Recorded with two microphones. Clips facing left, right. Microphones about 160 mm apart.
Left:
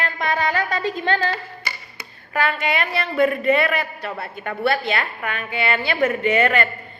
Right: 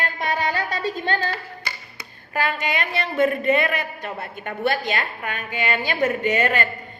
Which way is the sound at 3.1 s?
45° right (ahead or behind).